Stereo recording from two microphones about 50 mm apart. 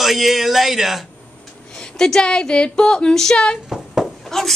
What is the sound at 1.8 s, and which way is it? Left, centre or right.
Speech, centre.